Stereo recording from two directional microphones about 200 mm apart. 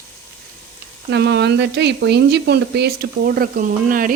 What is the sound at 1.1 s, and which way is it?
Speech, 55° right (ahead or behind).